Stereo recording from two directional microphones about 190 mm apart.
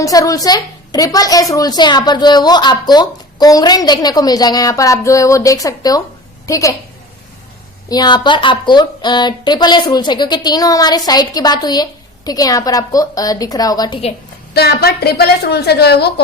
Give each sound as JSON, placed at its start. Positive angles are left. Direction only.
{"t": 0.0, "sound": "a woman's voice", "side_deg": 20}
{"t": 7.9, "sound": "a woman's voice", "side_deg": 20}
{"t": 14.5, "sound": "a woman's voice", "side_deg": 55}